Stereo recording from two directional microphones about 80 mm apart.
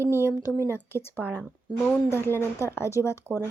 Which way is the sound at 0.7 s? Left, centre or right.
Left.